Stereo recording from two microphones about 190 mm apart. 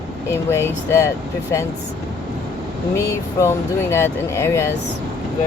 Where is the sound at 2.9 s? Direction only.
15° left (ahead or behind).